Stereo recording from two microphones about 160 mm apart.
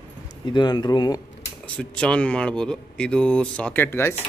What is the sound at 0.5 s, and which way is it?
Speech, 30° left (ahead or behind).